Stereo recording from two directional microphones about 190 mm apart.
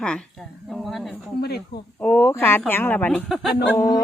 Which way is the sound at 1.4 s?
55° left (ahead or behind).